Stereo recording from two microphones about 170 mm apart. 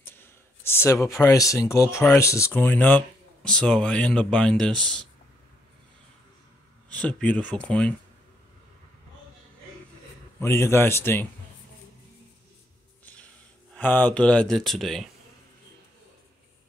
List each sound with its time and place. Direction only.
0.0 s speech: 15° left (ahead or behind)
6.9 s speech: 5° left (ahead or behind)
10.4 s speech: 15° left (ahead or behind)
13.0 s music: 10° left (ahead or behind)
13.7 s speech: 10° left (ahead or behind)